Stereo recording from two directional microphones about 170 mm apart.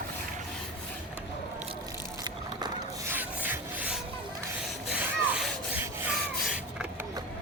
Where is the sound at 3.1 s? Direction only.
10° right (ahead or behind).